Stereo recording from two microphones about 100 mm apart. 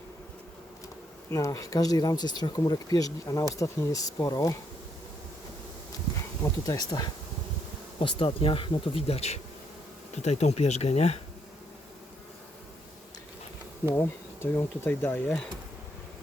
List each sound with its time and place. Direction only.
1.3 s speech: 30° left (ahead or behind)
6.4 s speech: 35° left (ahead or behind)
7.9 s speech: 65° left (ahead or behind); by 11.2 s 90° left
14.5 s speech: 20° left (ahead or behind)